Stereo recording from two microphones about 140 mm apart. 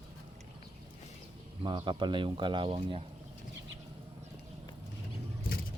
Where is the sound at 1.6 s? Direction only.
35° right (ahead or behind).